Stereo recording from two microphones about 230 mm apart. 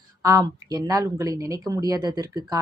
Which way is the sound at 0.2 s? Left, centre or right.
Centre.